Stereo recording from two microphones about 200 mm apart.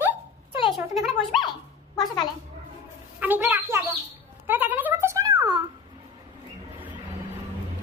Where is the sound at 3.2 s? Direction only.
10° right (ahead or behind).